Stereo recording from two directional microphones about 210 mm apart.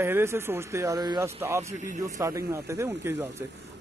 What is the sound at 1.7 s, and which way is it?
Speech, 35° right (ahead or behind).